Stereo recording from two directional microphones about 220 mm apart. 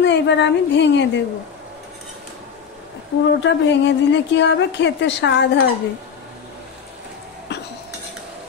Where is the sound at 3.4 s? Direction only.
55° left (ahead or behind).